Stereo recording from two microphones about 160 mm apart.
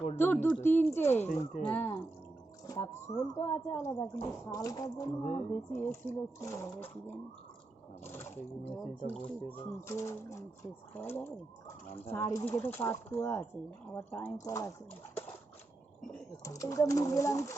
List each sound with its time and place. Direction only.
0.2 s speech: 15° left (ahead or behind)
2.6 s speech: 20° left (ahead or behind)
5.2 s speech: 50° left (ahead or behind)
5.8 s speech: 10° left (ahead or behind)
8.0 s speech: 15° left (ahead or behind)
16.4 s speech: 20° left (ahead or behind)